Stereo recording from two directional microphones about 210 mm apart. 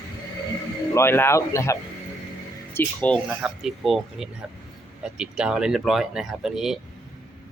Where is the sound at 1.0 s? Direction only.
10° left (ahead or behind).